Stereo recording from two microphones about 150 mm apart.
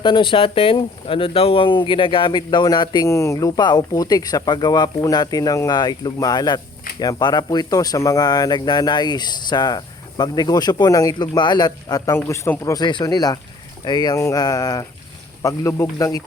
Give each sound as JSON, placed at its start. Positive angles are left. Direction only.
{"t": 0.0, "sound": "speech", "side_deg": 35}